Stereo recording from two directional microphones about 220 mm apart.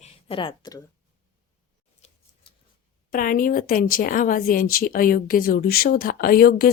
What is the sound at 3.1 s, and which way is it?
Speech, 40° left (ahead or behind).